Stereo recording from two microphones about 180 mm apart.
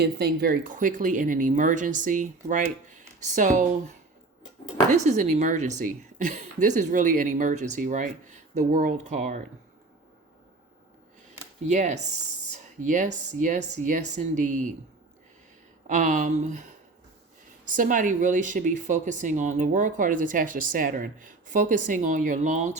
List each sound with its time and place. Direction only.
0.0 s speech: 65° right (ahead or behind); by 3.9 s 45° right (ahead or behind)
4.9 s speech: 40° right (ahead or behind)
11.7 s speech: 45° right (ahead or behind)
15.9 s speech: 45° right (ahead or behind)